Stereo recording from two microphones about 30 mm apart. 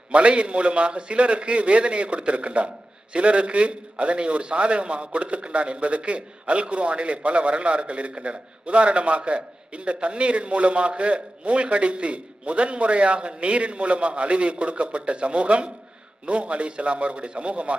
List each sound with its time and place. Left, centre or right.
0.1 s a man's voice: right